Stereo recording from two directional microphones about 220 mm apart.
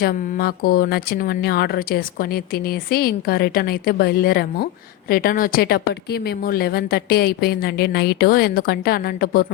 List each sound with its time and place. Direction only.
0.0 s speech: 45° left (ahead or behind)